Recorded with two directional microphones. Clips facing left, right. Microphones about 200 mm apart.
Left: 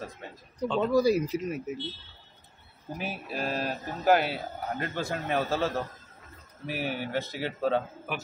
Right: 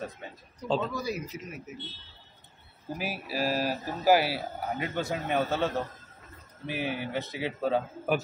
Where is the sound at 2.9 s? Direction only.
5° right (ahead or behind).